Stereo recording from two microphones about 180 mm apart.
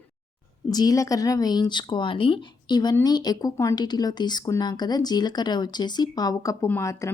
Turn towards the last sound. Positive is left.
turn(degrees=15)  # may be behind; listen again after turning